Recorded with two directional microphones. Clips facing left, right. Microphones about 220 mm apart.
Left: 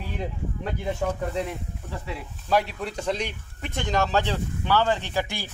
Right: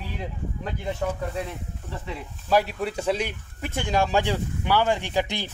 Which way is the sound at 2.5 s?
5° right (ahead or behind).